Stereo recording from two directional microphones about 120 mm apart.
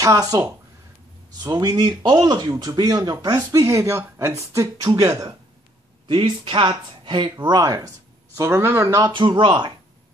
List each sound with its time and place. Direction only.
0.0 s speech: 30° right (ahead or behind)
6.0 s speech: 45° right (ahead or behind)
7.4 s speech: 35° right (ahead or behind)
8.4 s speech: 20° right (ahead or behind)
9.0 s speech: 40° right (ahead or behind)